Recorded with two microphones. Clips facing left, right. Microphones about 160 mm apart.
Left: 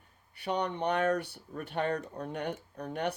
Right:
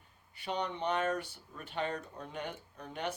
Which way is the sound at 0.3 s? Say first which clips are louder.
Left 4 dB; 65° left (ahead or behind).